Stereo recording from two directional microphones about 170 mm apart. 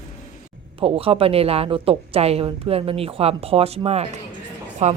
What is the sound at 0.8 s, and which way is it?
A woman's voice, 35° right (ahead or behind).